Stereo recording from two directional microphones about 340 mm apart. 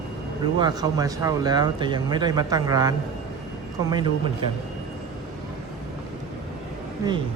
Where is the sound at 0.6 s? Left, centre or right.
Centre.